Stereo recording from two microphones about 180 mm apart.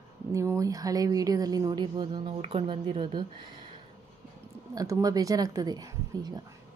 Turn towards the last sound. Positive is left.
turn(degrees=-20)  # may be behind; listen again after turning